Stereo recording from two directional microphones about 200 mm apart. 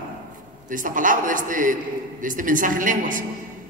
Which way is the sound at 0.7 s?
40° right (ahead or behind).